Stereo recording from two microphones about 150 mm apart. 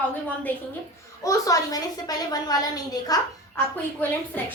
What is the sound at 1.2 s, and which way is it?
A child's voice, 25° left (ahead or behind).